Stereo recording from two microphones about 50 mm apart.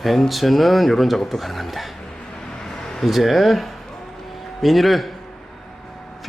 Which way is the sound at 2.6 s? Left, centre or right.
Centre.